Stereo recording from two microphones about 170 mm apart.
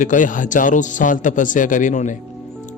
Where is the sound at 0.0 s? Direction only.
50° left (ahead or behind).